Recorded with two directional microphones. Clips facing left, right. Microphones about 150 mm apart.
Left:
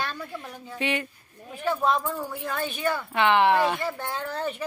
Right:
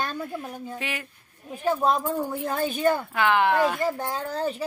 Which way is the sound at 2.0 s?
25° right (ahead or behind).